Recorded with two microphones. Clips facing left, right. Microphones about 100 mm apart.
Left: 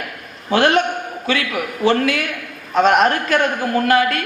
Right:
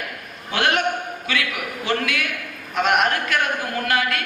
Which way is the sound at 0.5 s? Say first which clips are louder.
Left 6 dB; 35° left (ahead or behind).